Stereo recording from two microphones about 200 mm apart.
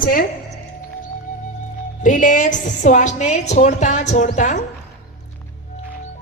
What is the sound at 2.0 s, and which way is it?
A woman's voice, 40° left (ahead or behind).